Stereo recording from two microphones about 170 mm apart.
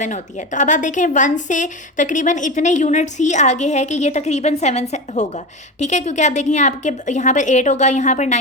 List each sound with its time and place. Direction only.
0.0 s a woman's voice: 45° left (ahead or behind)